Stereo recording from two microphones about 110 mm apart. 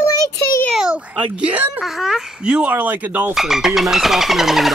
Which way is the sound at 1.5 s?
15° right (ahead or behind).